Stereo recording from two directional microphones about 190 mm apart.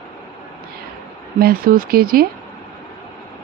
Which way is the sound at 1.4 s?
50° right (ahead or behind).